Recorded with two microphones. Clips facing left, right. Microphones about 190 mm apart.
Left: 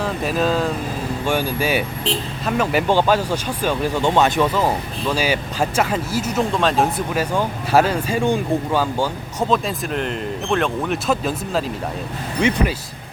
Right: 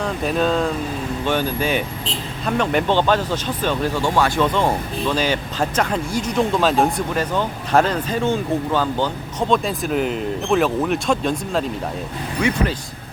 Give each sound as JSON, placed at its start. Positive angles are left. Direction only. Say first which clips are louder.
{"t": 0.0, "sound": "speech", "louder": "even", "side_deg": 0}
{"t": 4.5, "sound": "speech", "louder": "right 1 dB", "side_deg": 5}
{"t": 12.4, "sound": "speech", "louder": "left 2 dB", "side_deg": 25}